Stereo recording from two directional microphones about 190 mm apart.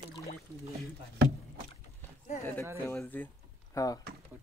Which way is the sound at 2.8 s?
10° left (ahead or behind).